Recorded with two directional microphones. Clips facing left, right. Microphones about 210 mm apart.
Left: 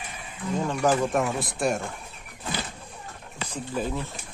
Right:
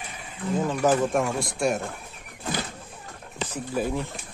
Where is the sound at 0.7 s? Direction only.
Centre (ahead or behind).